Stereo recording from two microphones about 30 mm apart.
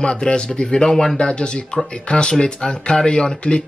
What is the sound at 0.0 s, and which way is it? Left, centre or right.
Speech, left.